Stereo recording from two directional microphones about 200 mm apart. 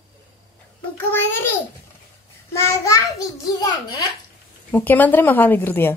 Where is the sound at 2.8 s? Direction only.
15° left (ahead or behind).